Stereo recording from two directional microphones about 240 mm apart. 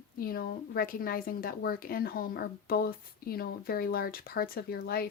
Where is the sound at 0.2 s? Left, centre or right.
Left.